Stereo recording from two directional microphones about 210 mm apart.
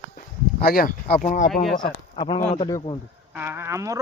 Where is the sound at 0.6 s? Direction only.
45° left (ahead or behind).